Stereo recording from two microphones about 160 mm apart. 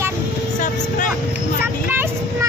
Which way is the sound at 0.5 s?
50° left (ahead or behind).